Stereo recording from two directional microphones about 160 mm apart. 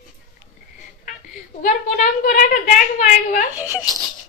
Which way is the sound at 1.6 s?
55° left (ahead or behind).